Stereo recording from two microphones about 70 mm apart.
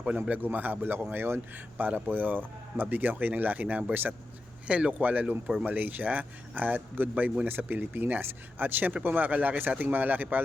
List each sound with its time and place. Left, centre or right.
0.2 s speech: right